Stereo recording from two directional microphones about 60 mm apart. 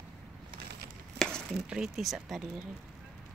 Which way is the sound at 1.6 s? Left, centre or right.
Centre.